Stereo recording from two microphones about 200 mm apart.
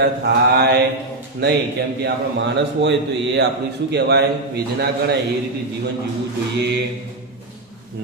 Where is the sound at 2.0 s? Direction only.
60° right (ahead or behind).